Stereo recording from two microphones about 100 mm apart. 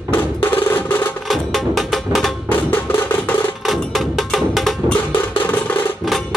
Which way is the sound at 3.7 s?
Centre (ahead or behind).